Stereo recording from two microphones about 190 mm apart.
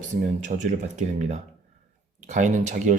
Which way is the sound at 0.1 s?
40° right (ahead or behind).